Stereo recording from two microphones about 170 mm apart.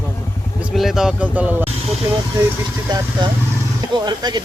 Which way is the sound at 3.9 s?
25° right (ahead or behind).